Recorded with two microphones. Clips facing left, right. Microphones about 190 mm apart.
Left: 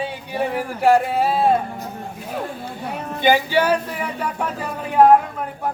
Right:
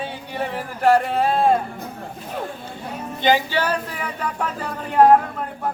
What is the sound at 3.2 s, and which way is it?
Speech, 10° left (ahead or behind).